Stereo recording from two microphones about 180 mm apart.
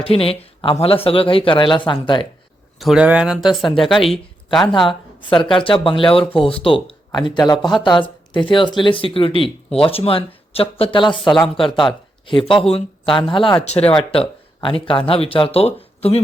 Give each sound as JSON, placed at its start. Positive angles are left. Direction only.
{"t": 0.0, "sound": "speech", "side_deg": 30}
{"t": 2.7, "sound": "speech", "side_deg": 0}
{"t": 5.3, "sound": "speech", "side_deg": 30}
{"t": 11.2, "sound": "speech", "side_deg": 0}
{"t": 12.2, "sound": "speech", "side_deg": 30}